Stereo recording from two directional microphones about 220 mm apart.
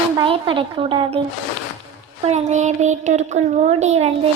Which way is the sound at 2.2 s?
30° right (ahead or behind).